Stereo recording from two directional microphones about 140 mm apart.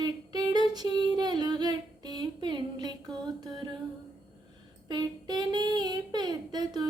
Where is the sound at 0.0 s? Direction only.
30° right (ahead or behind).